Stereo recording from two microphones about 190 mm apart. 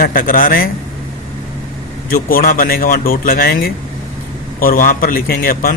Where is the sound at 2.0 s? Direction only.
50° left (ahead or behind).